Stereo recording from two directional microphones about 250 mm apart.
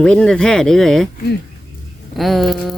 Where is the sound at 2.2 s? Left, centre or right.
Centre.